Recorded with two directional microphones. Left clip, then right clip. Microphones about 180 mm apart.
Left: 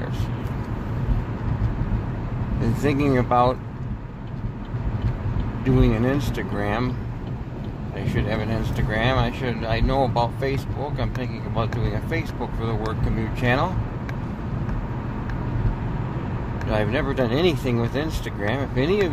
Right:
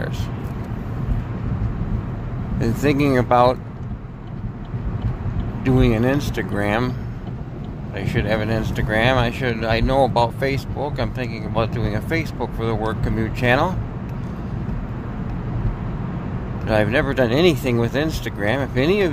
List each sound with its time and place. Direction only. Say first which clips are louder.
2.6 s speech: right 4 dB; 30° right (ahead or behind)
5.6 s speech: right 3 dB; 30° right (ahead or behind)
8.0 s speech: right 5 dB; 35° right (ahead or behind)
16.6 s speech: right 5 dB; 30° right (ahead or behind)